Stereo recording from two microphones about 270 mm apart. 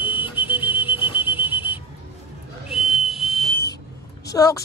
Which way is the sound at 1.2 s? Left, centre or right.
Centre.